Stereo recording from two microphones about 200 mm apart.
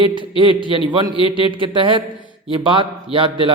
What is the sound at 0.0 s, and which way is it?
A man's voice, 25° right (ahead or behind).